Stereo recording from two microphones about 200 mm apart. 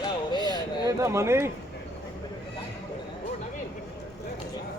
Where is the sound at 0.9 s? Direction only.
15° right (ahead or behind).